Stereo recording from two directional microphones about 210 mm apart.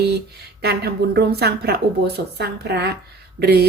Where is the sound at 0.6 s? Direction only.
50° right (ahead or behind).